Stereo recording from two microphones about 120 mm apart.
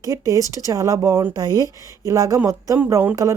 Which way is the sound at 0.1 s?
30° right (ahead or behind).